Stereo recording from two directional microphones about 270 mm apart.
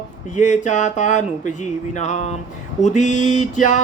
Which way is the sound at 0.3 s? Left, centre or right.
Left.